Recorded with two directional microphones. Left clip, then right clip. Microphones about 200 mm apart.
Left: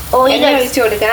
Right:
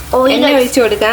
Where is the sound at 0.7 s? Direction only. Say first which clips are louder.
Right 2 dB; 35° right (ahead or behind).